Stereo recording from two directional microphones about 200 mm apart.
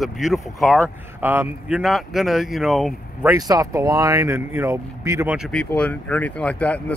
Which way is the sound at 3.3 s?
20° right (ahead or behind).